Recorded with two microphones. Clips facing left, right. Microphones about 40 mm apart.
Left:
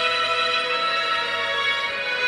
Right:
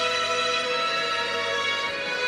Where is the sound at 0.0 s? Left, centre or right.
Left.